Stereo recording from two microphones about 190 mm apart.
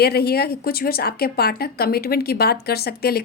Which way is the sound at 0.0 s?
55° left (ahead or behind).